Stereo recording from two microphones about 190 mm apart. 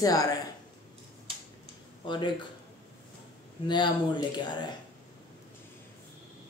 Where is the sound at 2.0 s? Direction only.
25° left (ahead or behind).